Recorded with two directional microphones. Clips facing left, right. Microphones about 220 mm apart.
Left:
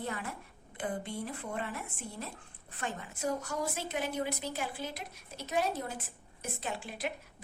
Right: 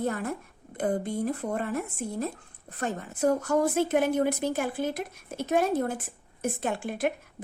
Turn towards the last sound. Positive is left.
turn(degrees=-50)  # may be behind; listen again after turning